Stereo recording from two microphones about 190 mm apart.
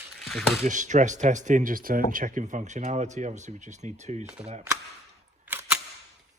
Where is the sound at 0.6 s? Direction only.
40° right (ahead or behind).